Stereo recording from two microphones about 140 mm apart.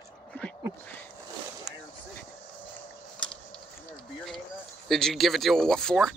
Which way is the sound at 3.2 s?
5° left (ahead or behind).